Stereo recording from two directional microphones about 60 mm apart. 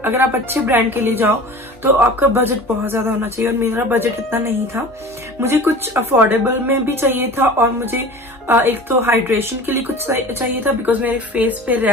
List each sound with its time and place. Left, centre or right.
0.0 s a woman's voice: right